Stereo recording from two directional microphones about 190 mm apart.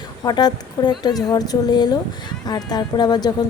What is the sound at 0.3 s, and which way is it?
A woman's voice, 20° left (ahead or behind).